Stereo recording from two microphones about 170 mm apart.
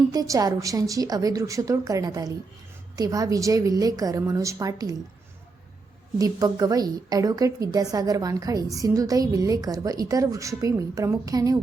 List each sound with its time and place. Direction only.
0.1 s a woman's voice: 20° right (ahead or behind)
6.1 s a woman's voice: 20° right (ahead or behind)